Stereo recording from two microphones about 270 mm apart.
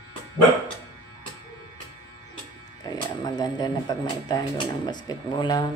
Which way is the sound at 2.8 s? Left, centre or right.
Centre.